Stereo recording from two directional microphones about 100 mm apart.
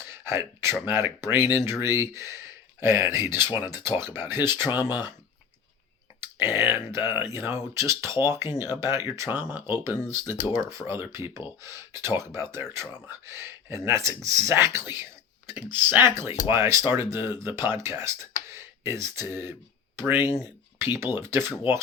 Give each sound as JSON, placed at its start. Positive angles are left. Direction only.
{"t": 0.0, "sound": "speech", "side_deg": -25}
{"t": 6.1, "sound": "speech", "side_deg": -25}
{"t": 9.5, "sound": "speech", "side_deg": -20}
{"t": 20.3, "sound": "a sound", "side_deg": -25}
{"t": 21.2, "sound": "speech", "side_deg": -25}